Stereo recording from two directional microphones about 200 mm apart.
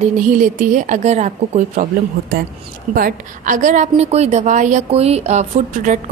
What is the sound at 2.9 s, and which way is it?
A woman's voice, 45° right (ahead or behind).